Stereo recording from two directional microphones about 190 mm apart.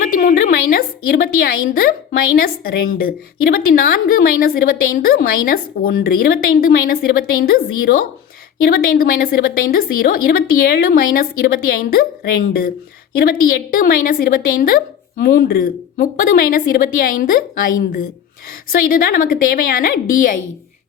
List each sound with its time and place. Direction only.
0.2 s a woman's voice: 50° left (ahead or behind)